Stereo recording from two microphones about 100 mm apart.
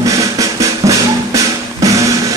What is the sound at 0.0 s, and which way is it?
Music, 35° right (ahead or behind).